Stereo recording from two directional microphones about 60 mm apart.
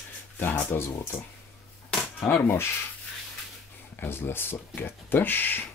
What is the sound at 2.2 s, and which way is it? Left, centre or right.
Speech, left.